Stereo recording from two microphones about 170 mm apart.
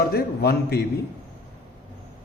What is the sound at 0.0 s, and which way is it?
Speech, 70° left (ahead or behind).